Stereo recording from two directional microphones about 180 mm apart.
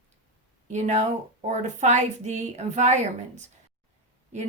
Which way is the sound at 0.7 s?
40° right (ahead or behind).